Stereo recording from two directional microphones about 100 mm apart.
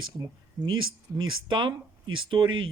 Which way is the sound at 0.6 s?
40° right (ahead or behind).